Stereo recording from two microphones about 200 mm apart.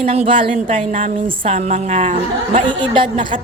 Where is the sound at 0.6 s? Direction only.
40° right (ahead or behind).